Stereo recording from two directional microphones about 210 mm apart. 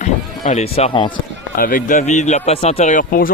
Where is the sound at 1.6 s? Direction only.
40° left (ahead or behind).